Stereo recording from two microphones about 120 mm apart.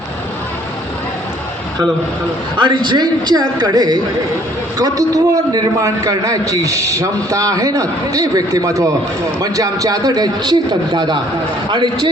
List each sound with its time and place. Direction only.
2.6 s a man's voice: 40° right (ahead or behind)